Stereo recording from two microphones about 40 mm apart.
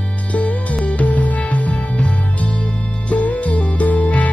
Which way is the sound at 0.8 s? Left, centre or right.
Left.